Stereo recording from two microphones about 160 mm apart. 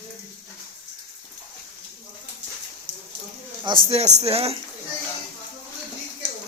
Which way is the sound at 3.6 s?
30° right (ahead or behind).